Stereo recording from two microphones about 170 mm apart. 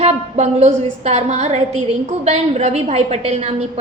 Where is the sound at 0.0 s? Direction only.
40° right (ahead or behind).